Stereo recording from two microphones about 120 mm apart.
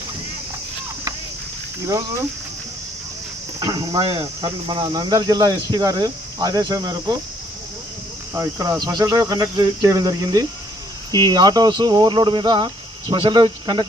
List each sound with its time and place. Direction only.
3.6 s speech: 30° right (ahead or behind)
8.3 s speech: 30° right (ahead or behind)